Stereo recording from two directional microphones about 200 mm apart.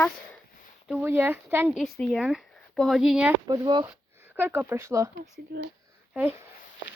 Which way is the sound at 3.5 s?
20° right (ahead or behind).